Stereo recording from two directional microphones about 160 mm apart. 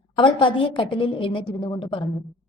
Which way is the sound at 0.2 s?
30° left (ahead or behind).